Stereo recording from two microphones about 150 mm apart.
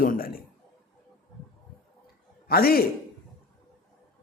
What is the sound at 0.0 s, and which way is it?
Speech, 70° left (ahead or behind).